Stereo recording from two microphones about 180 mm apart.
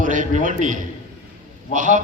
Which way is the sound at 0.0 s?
45° right (ahead or behind).